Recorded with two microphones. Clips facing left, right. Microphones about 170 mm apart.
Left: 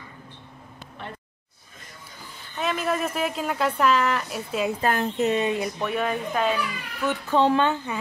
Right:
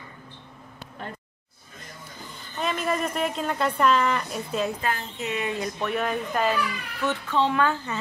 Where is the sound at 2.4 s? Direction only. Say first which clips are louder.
Left 1 dB; 5° left (ahead or behind).